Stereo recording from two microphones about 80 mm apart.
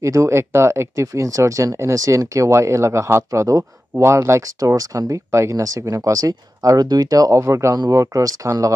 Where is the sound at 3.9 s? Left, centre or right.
Right.